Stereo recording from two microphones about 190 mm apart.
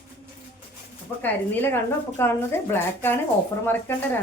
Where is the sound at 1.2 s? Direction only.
10° left (ahead or behind).